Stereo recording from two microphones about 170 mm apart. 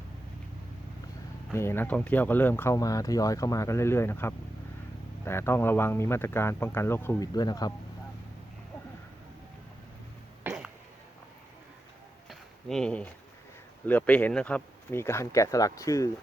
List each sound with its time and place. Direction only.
1.5 s speech: 15° left (ahead or behind)
10.4 s music: 5° right (ahead or behind)
12.3 s a sound: centre (ahead or behind)
13.8 s speech: 10° left (ahead or behind)